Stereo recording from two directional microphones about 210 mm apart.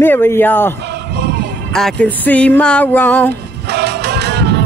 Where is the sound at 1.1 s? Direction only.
50° right (ahead or behind).